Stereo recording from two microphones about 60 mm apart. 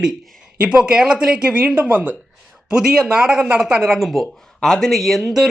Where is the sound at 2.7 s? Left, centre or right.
Centre.